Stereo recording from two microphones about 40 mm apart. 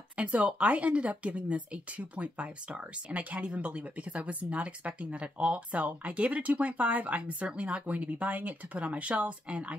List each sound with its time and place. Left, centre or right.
0.1 s speech: right